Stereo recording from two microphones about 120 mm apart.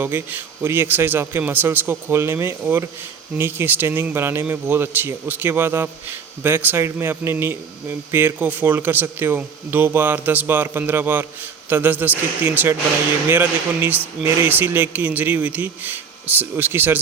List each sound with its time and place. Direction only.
0.0 s speech: 15° right (ahead or behind)